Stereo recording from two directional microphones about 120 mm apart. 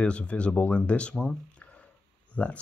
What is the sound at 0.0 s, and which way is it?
Speech, 10° left (ahead or behind).